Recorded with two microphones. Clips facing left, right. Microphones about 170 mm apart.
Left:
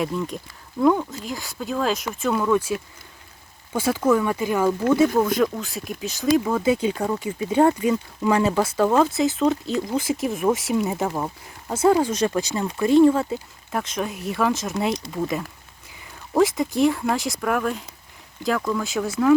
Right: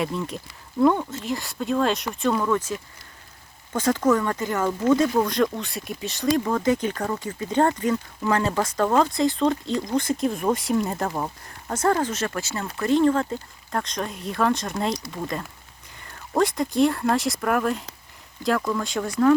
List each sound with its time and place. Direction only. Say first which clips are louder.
0.0 s speech: left 2 dB; centre (ahead or behind)